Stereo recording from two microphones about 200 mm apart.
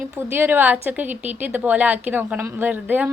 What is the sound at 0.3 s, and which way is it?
A woman's voice, 10° right (ahead or behind).